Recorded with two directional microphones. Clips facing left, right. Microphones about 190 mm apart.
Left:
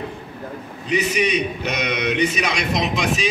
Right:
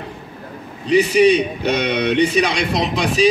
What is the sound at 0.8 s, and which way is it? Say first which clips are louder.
A man's voice: right 8 dB; 35° right (ahead or behind).